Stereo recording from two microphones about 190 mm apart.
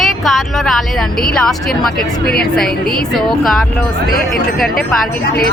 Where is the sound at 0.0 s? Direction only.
Centre (ahead or behind).